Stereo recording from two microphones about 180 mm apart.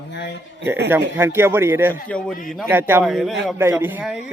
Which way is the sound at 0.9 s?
15° right (ahead or behind).